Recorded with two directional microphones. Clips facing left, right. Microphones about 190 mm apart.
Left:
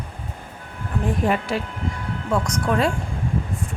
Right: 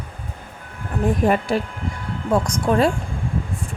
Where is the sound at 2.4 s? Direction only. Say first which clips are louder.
Right 3 dB; 30° right (ahead or behind).